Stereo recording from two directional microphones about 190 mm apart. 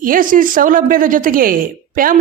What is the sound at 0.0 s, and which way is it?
A woman's voice, 45° right (ahead or behind).